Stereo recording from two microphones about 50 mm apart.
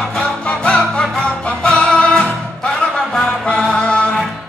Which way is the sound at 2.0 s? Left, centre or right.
Left.